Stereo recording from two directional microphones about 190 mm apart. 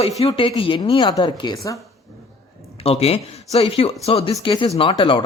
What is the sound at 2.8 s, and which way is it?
Speech, 30° left (ahead or behind).